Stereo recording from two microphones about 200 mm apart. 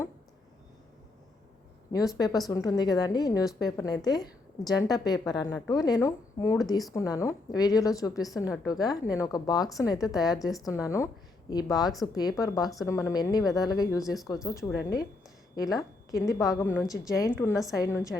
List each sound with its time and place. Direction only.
1.9 s a woman's voice: 20° left (ahead or behind)
14.7 s a woman's voice: 55° left (ahead or behind)
15.5 s a woman's voice: 15° left (ahead or behind)